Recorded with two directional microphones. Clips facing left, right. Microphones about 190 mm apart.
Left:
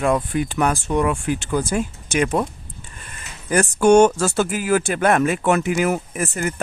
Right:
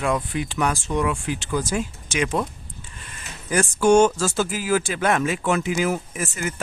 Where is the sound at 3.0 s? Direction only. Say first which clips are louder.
Right 1 dB; 50° left (ahead or behind).